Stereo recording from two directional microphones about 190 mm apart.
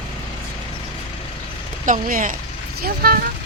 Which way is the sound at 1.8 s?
45° right (ahead or behind).